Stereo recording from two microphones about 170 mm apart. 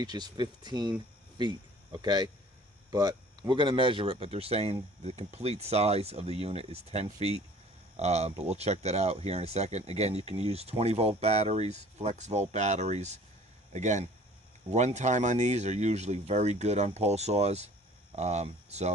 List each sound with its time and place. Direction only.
0.0 s speech: 25° right (ahead or behind); by 18.9 s 40° right (ahead or behind)